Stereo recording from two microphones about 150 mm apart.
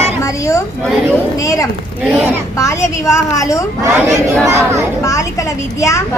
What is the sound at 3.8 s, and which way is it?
Speech, 20° right (ahead or behind).